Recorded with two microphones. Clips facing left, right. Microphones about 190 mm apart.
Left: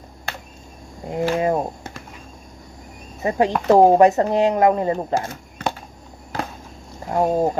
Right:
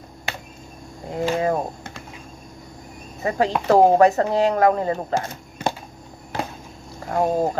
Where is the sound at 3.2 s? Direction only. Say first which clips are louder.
Left 2 dB; 20° left (ahead or behind).